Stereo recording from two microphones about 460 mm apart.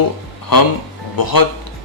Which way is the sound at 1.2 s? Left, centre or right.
Left.